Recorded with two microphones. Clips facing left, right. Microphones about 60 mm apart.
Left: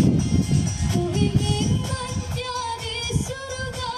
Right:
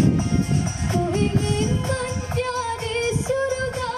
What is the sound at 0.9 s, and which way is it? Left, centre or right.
Music, right.